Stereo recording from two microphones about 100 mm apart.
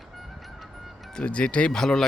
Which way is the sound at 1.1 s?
10° left (ahead or behind).